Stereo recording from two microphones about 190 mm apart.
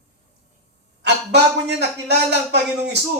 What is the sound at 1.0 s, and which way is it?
A man's voice, 65° right (ahead or behind).